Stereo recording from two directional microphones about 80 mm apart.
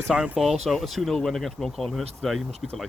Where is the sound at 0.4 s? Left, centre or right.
Centre.